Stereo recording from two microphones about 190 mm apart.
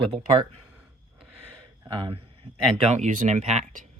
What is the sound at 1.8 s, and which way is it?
Speech, 25° right (ahead or behind).